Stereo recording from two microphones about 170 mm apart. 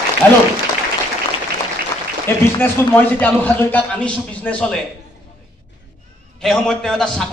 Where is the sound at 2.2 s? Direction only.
15° left (ahead or behind).